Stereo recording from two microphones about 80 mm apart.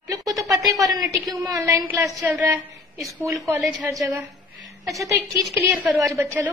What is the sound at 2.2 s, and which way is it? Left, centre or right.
Speech, right.